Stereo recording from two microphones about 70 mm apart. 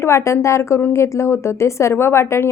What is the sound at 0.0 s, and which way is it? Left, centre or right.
A woman's voice, left.